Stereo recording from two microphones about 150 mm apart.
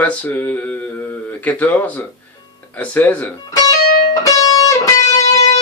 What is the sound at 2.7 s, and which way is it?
Speech, 10° left (ahead or behind).